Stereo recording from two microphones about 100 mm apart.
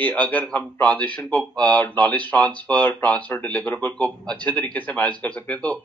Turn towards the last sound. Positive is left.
turn(degrees=15)  # may be behind; listen again after turning